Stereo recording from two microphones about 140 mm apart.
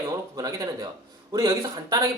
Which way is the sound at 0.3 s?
25° right (ahead or behind).